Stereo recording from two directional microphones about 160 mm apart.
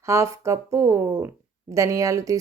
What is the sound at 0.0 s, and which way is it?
Speech, 20° right (ahead or behind).